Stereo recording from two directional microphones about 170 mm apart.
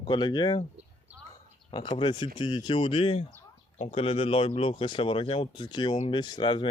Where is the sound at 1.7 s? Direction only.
30° left (ahead or behind).